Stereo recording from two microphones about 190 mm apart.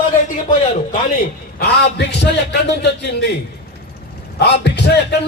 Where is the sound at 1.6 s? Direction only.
60° left (ahead or behind).